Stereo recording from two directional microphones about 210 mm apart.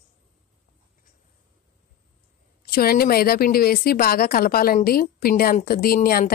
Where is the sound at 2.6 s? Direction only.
45° left (ahead or behind).